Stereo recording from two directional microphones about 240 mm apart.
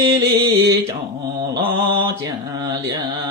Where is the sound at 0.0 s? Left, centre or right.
Centre.